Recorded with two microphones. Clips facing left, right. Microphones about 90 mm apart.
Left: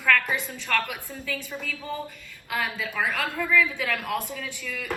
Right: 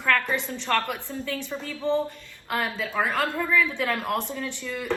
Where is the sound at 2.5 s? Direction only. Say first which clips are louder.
Right 1 dB; 45° right (ahead or behind).